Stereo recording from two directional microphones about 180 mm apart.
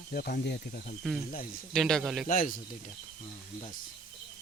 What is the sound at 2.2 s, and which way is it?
Speech, 50° left (ahead or behind).